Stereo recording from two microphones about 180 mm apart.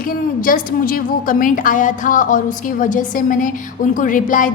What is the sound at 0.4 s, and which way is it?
A woman's voice, 50° left (ahead or behind).